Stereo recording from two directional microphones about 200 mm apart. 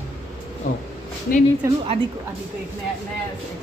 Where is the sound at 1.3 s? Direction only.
45° left (ahead or behind).